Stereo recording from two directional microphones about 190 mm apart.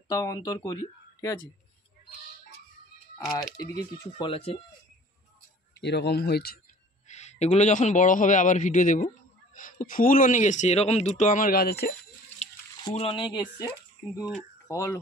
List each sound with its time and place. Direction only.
0.1 s speech: 15° left (ahead or behind)
4.0 s speech: 25° left (ahead or behind)
5.8 s speech: 60° left (ahead or behind)
7.1 s a man's voice: 35° left (ahead or behind); by 11.9 s 55° left (ahead or behind)
12.8 s speech: 30° left (ahead or behind)